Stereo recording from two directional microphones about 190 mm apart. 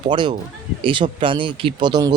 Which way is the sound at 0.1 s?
25° right (ahead or behind).